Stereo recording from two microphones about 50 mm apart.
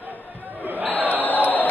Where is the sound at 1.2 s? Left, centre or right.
Left.